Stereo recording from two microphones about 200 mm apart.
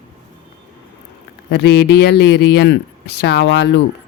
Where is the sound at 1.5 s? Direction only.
55° left (ahead or behind).